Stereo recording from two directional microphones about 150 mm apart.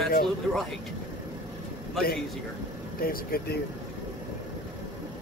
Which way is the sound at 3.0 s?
80° left.